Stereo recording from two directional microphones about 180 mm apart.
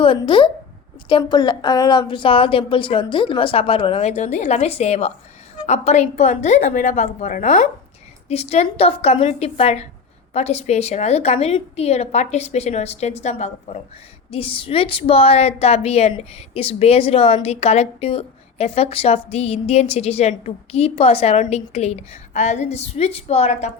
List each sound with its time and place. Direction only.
0.0 s a woman's voice: 30° left (ahead or behind)